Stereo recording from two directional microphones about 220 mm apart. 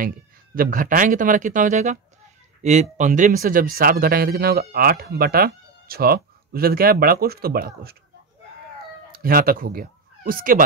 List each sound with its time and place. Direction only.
0.6 s speech: 40° right (ahead or behind)
9.1 s speech: 40° right (ahead or behind)